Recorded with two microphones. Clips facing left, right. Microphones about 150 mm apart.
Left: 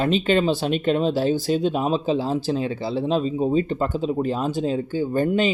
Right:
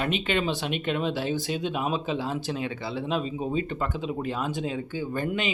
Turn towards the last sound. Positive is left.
turn(degrees=35)  # may be behind; listen again after turning